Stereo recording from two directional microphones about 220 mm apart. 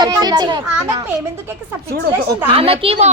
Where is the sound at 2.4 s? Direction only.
25° right (ahead or behind).